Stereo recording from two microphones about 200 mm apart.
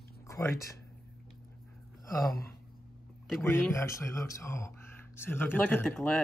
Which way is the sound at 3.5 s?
15° left (ahead or behind).